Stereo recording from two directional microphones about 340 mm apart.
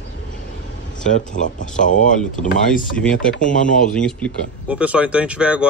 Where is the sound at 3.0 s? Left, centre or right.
Centre.